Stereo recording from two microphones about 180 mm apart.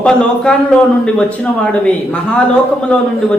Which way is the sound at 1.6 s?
5° left (ahead or behind).